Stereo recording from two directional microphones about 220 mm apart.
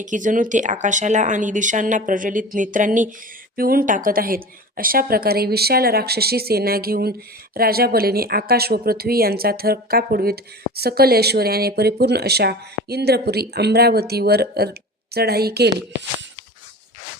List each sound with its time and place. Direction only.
0.0 s speech: 35° right (ahead or behind)